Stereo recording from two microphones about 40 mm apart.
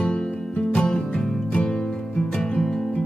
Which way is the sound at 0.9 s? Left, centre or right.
Left.